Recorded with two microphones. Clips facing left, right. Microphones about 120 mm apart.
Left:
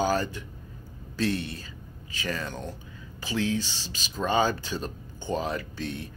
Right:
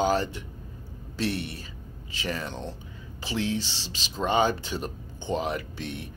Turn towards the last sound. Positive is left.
turn(degrees=-25)  # may be behind; listen again after turning